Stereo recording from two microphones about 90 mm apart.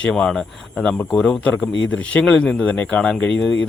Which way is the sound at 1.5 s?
20° left (ahead or behind).